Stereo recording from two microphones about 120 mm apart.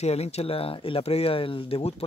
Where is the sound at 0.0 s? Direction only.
60° left (ahead or behind).